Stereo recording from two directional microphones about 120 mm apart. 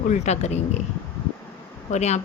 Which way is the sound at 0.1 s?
70° left (ahead or behind).